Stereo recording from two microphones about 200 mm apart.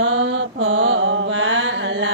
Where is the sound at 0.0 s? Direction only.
70° right (ahead or behind).